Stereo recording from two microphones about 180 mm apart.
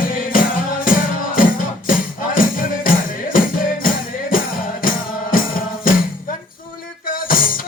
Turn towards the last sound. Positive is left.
turn(degrees=50)  # may be behind; listen again after turning